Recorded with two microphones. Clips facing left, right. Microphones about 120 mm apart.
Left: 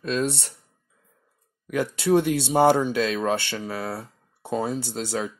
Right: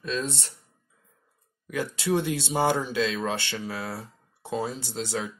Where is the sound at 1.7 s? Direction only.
55° left (ahead or behind).